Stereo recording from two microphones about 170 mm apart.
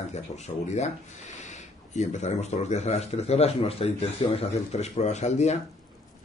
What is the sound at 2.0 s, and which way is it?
Speech, 40° left (ahead or behind).